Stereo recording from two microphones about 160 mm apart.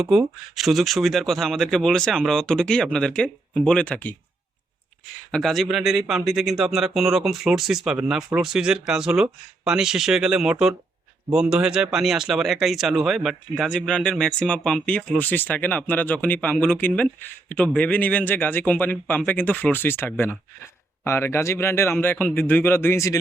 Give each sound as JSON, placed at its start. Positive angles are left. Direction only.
{"t": 0.0, "sound": "speech", "side_deg": 0}
{"t": 5.3, "sound": "speech", "side_deg": 0}